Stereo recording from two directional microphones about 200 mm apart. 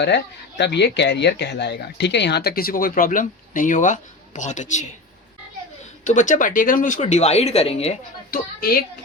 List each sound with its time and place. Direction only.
0.0 s speech: 60° left (ahead or behind); by 4.9 s 35° left (ahead or behind)
6.1 s speech: 40° left (ahead or behind)
8.3 s speech: 50° left (ahead or behind)